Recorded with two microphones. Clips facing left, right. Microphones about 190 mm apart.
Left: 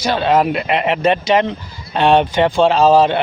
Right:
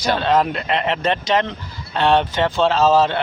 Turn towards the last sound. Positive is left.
turn(degrees=15)  # may be behind; listen again after turning